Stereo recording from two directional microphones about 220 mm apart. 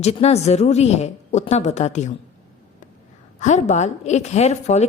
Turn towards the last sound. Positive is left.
turn(degrees=30)  # may be behind; listen again after turning